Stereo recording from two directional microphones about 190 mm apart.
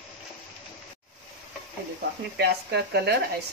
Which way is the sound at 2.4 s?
60° right (ahead or behind).